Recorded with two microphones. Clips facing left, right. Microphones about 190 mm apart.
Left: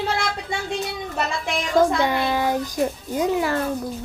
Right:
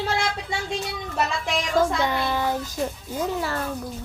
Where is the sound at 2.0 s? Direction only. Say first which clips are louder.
Left 3 dB; 10° left (ahead or behind).